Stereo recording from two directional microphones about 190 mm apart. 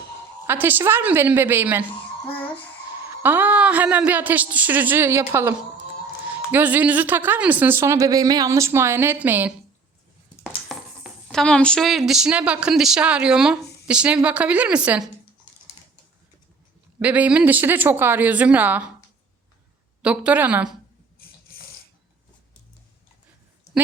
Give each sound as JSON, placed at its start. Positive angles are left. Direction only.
{"t": 0.4, "sound": "a woman's voice", "side_deg": -10}
{"t": 3.2, "sound": "a woman's voice", "side_deg": -10}
{"t": 10.4, "sound": "a woman's voice", "side_deg": 0}
{"t": 17.0, "sound": "a woman's voice", "side_deg": -5}
{"t": 20.0, "sound": "a woman's voice", "side_deg": -5}
{"t": 21.2, "sound": "a sound", "side_deg": 50}